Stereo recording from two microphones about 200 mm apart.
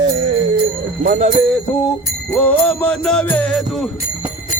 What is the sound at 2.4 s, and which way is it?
Jingle bell, 5° left (ahead or behind).